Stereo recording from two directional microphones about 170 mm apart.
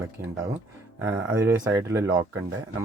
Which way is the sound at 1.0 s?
15° right (ahead or behind).